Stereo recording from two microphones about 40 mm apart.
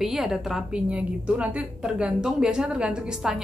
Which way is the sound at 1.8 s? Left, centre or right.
Centre.